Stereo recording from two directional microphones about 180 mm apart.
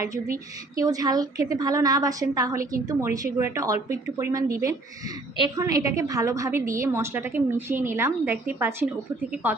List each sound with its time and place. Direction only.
0.0 s a woman's voice: 15° right (ahead or behind)